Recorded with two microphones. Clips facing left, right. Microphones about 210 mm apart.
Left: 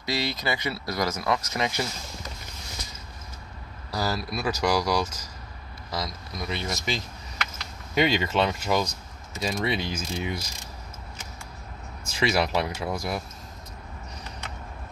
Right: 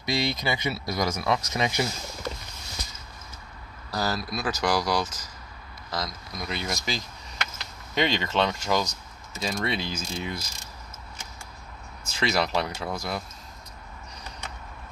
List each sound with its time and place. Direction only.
0.0 s speech: 15° right (ahead or behind)
3.9 s speech: 10° left (ahead or behind)
12.1 s speech: 10° left (ahead or behind)